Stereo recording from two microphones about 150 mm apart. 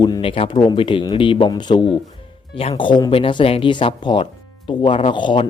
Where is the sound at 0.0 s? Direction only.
30° left (ahead or behind).